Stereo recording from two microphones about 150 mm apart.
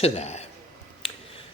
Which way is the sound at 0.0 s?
45° left (ahead or behind).